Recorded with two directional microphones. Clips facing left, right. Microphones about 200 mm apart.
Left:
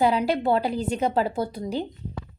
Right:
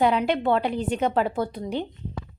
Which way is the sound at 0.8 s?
35° left (ahead or behind).